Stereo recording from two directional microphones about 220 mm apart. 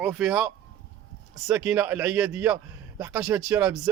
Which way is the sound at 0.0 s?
Centre (ahead or behind).